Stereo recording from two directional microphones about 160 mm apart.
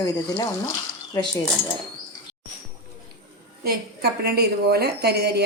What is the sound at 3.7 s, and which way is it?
A woman's voice, 75° right (ahead or behind).